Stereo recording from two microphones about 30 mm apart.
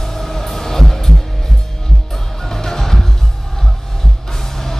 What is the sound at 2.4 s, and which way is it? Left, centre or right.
Music, centre.